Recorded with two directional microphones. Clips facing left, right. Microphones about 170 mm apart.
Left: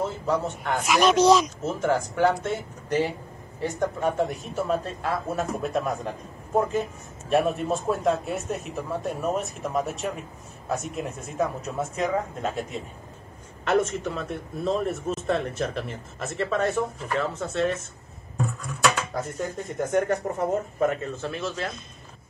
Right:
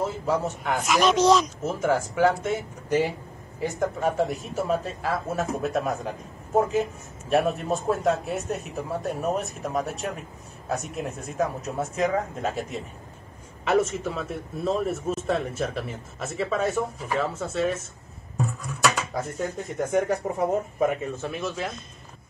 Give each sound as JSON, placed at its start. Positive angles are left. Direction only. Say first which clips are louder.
{"t": 0.3, "sound": "a man's voice", "louder": "even", "side_deg": 0}
{"t": 1.6, "sound": "a man's voice", "louder": "even", "side_deg": -10}
{"t": 7.2, "sound": "a man's voice", "louder": "even", "side_deg": 0}
{"t": 18.4, "sound": "dishes", "louder": "even", "side_deg": 0}
{"t": 19.9, "sound": "speech", "louder": "even", "side_deg": -5}